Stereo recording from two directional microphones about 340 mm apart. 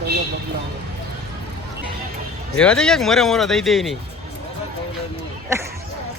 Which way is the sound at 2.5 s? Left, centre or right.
Centre.